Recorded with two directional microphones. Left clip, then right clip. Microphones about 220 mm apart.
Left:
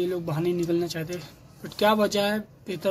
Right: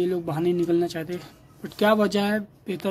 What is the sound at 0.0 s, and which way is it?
Speech, 20° right (ahead or behind).